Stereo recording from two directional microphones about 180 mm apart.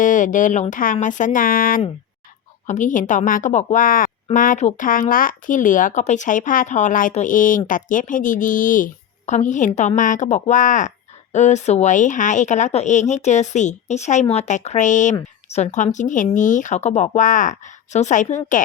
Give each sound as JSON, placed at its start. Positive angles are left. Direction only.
{"t": 0.0, "sound": "speech", "side_deg": 45}